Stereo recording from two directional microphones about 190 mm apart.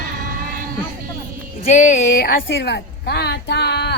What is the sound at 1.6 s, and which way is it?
Speech, 40° left (ahead or behind).